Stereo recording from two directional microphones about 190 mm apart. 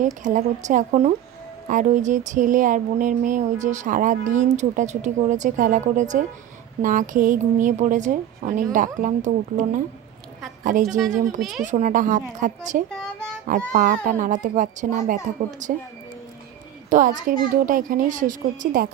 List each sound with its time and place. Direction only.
0.2 s a woman's voice: 40° right (ahead or behind)
11.3 s speech: centre (ahead or behind)
11.6 s speech: 40° right (ahead or behind)
13.0 s child singing: 5° left (ahead or behind)
13.7 s speech: 40° right (ahead or behind)
16.9 s a woman's voice: 45° right (ahead or behind)